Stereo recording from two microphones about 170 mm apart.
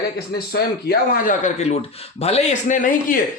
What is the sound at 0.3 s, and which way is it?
A man's voice, 65° left (ahead or behind).